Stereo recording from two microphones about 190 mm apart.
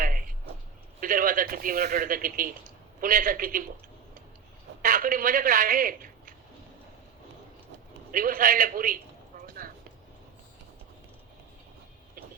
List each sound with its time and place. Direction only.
0.0 s a sound: 45° right (ahead or behind)
0.9 s a man's voice: 45° right (ahead or behind)
4.8 s a man's voice: 45° right (ahead or behind)
8.1 s a man's voice: 45° right (ahead or behind)